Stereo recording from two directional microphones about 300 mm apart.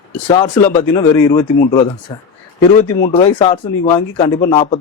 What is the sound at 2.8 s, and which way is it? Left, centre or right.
Speech, left.